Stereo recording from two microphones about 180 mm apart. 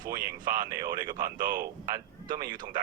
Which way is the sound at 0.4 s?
50° right (ahead or behind).